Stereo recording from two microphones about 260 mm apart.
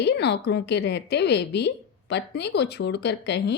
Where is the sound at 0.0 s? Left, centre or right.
Left.